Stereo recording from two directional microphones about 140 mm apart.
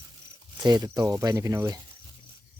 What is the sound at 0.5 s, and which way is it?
Speech, 30° right (ahead or behind).